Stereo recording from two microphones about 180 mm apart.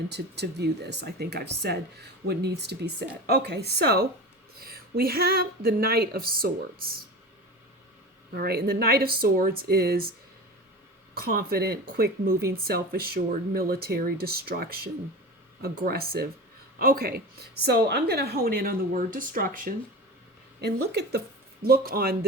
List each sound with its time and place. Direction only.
0.1 s speech: 70° right (ahead or behind)
8.4 s speech: 60° right (ahead or behind)
20.6 s speech: 65° right (ahead or behind)